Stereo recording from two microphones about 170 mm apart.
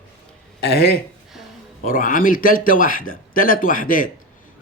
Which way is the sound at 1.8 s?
55° left (ahead or behind).